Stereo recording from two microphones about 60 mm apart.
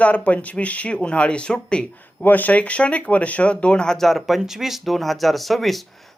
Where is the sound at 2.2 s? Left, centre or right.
Left.